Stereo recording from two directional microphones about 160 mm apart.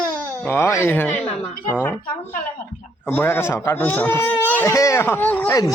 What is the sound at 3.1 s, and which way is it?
Speech, 10° left (ahead or behind).